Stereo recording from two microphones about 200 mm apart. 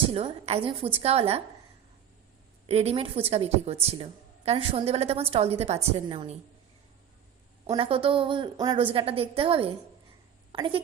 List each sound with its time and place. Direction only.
0.1 s a woman's voice: 30° right (ahead or behind)
2.6 s a woman's voice: 30° right (ahead or behind)
7.7 s a woman's voice: 25° right (ahead or behind)